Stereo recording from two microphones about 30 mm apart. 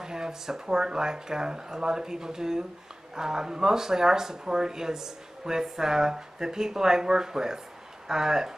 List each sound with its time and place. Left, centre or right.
0.0 s speech: right